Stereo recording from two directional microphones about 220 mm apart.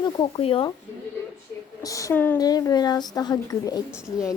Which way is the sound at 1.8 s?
15° left (ahead or behind).